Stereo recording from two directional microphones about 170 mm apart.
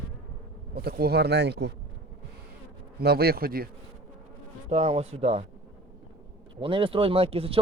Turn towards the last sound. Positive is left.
turn(degrees=-35)  # may be behind; listen again after turning